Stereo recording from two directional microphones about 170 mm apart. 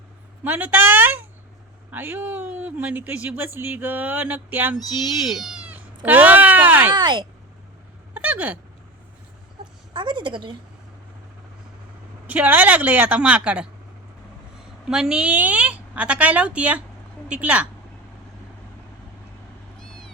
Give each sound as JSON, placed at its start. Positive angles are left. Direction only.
{"t": 0.4, "sound": "speech", "side_deg": -10}
{"t": 4.9, "sound": "cat", "side_deg": 0}
{"t": 6.9, "sound": "a woman's voice", "side_deg": -25}
{"t": 8.1, "sound": "hiccup", "side_deg": -10}
{"t": 9.9, "sound": "a woman's voice", "side_deg": -30}
{"t": 12.3, "sound": "speech", "side_deg": -10}
{"t": 14.8, "sound": "a woman's voice", "side_deg": -5}